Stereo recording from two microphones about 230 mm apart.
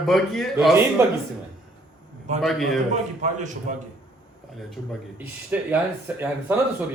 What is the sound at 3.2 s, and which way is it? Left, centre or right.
Speech, right.